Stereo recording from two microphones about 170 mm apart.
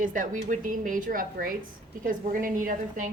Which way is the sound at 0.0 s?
50° right (ahead or behind).